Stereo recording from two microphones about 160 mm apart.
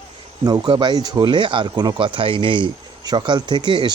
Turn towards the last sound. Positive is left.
turn(degrees=-30)  # may be behind; listen again after turning